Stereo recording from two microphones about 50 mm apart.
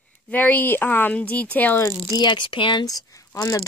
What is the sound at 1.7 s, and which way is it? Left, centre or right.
Speech, left.